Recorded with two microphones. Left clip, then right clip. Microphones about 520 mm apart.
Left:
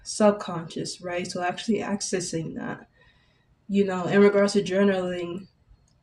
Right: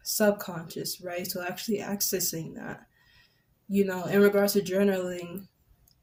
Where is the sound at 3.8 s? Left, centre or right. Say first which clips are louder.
Left 4 dB; right.